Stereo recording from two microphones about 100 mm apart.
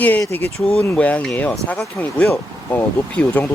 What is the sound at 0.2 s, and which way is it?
Speech, 20° left (ahead or behind).